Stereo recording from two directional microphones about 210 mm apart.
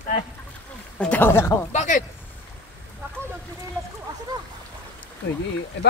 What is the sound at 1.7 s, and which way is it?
Speech, 35° left (ahead or behind).